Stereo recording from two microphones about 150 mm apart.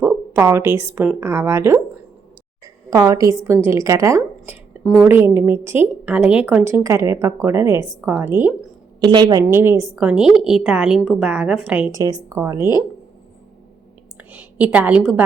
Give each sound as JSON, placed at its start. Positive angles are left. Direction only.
{"t": 0.0, "sound": "a woman's voice", "side_deg": -15}
{"t": 2.9, "sound": "a woman's voice", "side_deg": -25}
{"t": 9.0, "sound": "a woman's voice", "side_deg": -30}
{"t": 9.5, "sound": "a woman's voice", "side_deg": -15}
{"t": 11.9, "sound": "a woman's voice", "side_deg": -20}
{"t": 14.2, "sound": "a woman's voice", "side_deg": -10}